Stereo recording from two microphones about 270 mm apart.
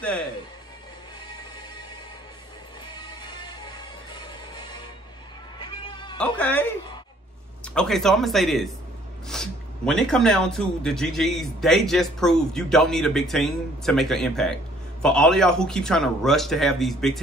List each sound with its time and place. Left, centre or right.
2.9 s music: centre
6.1 s speech: centre